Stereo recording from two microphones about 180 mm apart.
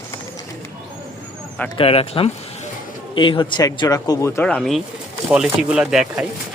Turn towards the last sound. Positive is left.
turn(degrees=-5)  # may be behind; listen again after turning